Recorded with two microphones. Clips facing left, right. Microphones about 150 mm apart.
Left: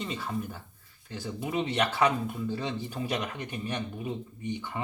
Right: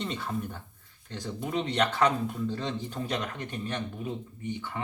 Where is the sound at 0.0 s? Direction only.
Centre (ahead or behind).